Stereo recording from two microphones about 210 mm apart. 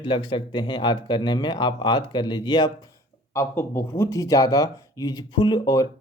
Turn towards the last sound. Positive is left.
turn(degrees=20)  # may be behind; listen again after turning